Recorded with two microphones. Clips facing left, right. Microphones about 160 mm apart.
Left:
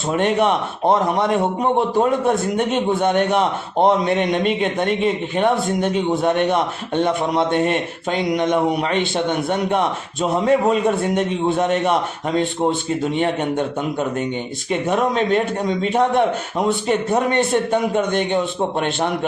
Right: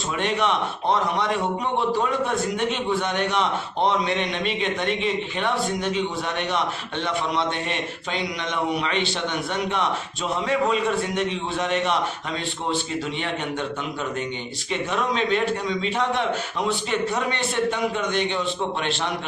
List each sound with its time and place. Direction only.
0.1 s a man's voice: 50° left (ahead or behind)
13.1 s a man's voice: 50° left (ahead or behind)